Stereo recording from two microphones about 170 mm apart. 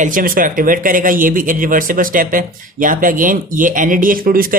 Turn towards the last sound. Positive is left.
turn(degrees=-60)  # may be behind; listen again after turning